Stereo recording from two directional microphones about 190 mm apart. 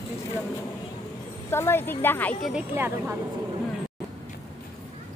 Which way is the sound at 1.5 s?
10° left (ahead or behind).